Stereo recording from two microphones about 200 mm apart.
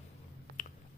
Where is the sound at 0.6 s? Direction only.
45° left (ahead or behind).